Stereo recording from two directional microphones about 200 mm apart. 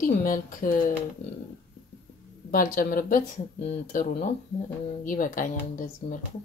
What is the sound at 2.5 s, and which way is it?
Speech, 45° left (ahead or behind).